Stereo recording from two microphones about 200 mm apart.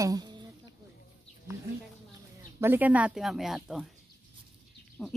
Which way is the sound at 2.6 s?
10° right (ahead or behind).